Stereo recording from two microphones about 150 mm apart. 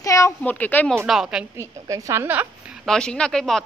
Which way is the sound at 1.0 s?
5° right (ahead or behind).